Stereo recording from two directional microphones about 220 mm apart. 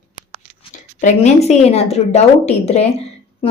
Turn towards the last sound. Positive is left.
turn(degrees=30)  # may be behind; listen again after turning